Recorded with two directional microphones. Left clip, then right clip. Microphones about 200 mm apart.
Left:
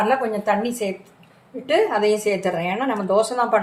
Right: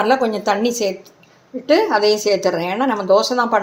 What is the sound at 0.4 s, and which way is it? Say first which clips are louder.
A woman's voice: right 4 dB; 40° right (ahead or behind).